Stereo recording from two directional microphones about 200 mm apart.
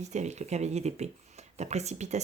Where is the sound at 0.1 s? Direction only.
35° right (ahead or behind).